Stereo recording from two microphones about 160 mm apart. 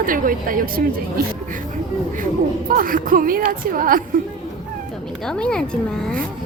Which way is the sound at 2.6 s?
60° right (ahead or behind).